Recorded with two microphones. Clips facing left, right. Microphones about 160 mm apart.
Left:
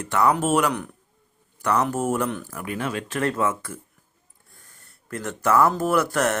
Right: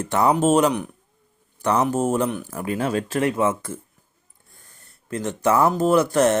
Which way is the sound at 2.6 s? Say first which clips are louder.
Right 7 dB; 35° right (ahead or behind).